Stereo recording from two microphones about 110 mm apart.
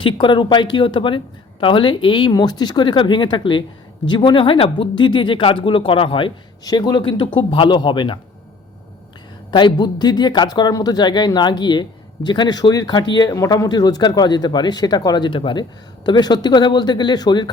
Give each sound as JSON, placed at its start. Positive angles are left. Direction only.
{"t": 0.0, "sound": "speech", "side_deg": 45}
{"t": 6.7, "sound": "speech", "side_deg": 40}
{"t": 9.5, "sound": "speech", "side_deg": 45}